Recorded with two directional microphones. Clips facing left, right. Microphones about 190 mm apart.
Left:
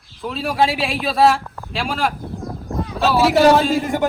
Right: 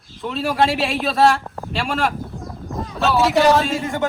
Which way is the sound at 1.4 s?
30° right (ahead or behind).